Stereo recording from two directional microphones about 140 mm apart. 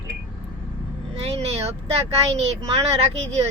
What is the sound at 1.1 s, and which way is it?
Speech, 50° right (ahead or behind).